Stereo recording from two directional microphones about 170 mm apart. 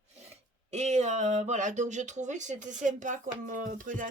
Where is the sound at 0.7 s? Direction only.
40° right (ahead or behind).